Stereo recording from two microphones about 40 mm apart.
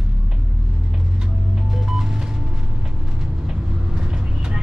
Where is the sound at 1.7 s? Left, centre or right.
Centre.